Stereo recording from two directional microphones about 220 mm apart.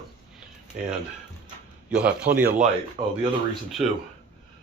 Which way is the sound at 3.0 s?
35° right (ahead or behind).